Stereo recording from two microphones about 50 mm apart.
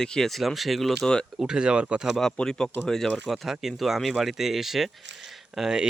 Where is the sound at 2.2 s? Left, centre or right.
Centre.